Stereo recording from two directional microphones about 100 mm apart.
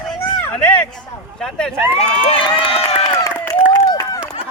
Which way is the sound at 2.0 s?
10° left (ahead or behind).